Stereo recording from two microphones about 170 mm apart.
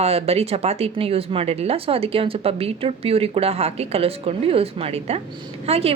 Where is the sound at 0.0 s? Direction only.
35° right (ahead or behind).